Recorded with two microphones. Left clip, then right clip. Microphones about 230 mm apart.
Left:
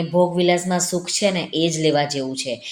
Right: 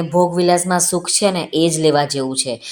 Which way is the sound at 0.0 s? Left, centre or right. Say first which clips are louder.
Right 3 dB; right.